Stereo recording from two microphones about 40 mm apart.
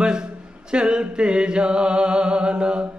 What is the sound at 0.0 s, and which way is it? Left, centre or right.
A capella, right.